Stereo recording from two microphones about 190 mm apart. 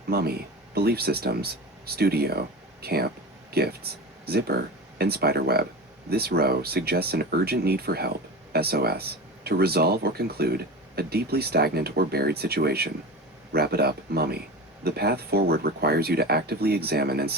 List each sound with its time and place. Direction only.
0.1 s speech: 55° right (ahead or behind)